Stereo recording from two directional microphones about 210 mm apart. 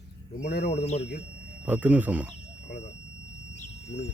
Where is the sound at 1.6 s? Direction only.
5° right (ahead or behind).